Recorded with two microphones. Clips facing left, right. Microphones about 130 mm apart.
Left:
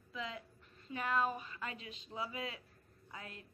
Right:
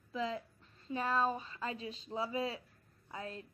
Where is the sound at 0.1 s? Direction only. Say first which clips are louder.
Right 7 dB; 35° right (ahead or behind).